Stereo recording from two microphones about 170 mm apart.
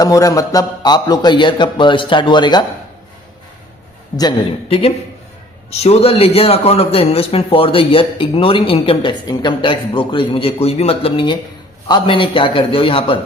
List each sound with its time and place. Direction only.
0.0 s a man's voice: 20° left (ahead or behind)
4.2 s a man's voice: 30° left (ahead or behind)